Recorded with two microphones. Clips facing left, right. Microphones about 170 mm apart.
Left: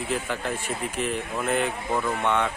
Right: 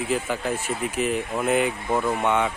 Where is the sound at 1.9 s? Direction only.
30° right (ahead or behind).